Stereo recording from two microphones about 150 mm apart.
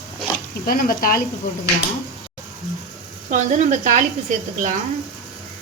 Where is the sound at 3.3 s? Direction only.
50° right (ahead or behind).